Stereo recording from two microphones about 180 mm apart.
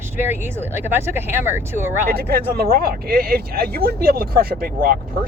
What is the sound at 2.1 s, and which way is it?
Speech, 60° right (ahead or behind).